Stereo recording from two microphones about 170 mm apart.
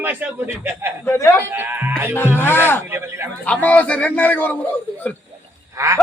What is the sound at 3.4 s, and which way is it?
Speech, 10° left (ahead or behind).